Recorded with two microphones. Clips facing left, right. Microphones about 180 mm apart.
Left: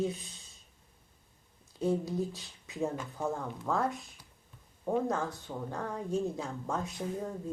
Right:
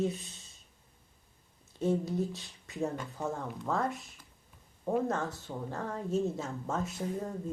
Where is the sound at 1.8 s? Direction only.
Centre (ahead or behind).